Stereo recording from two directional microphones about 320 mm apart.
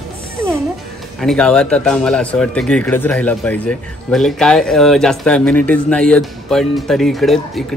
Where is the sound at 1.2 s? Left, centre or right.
Centre.